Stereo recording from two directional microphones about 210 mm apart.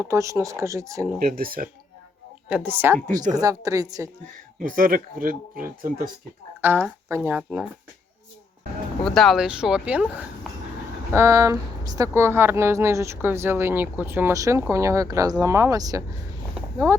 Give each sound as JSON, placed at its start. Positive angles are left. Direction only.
{"t": 0.0, "sound": "speech", "side_deg": -15}
{"t": 1.2, "sound": "speech", "side_deg": -45}
{"t": 2.5, "sound": "speech", "side_deg": -10}
{"t": 4.7, "sound": "speech", "side_deg": -40}
{"t": 6.6, "sound": "speech", "side_deg": -10}
{"t": 9.0, "sound": "speech", "side_deg": 0}